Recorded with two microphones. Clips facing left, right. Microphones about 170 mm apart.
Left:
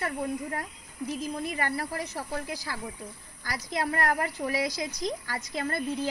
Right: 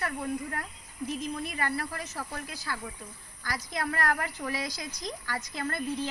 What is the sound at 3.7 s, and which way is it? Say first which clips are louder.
Speech: left 3 dB; 20° left (ahead or behind).